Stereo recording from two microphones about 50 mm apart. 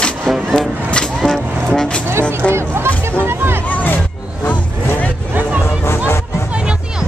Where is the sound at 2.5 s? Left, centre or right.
Right.